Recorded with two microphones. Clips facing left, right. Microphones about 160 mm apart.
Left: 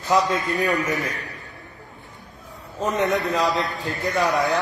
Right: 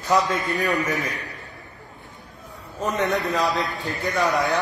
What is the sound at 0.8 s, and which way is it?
Speech, centre (ahead or behind).